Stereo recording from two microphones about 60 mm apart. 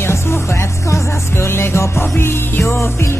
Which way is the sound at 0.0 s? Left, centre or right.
Left.